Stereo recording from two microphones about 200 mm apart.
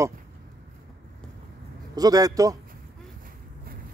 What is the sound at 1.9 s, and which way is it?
Speech, 20° right (ahead or behind).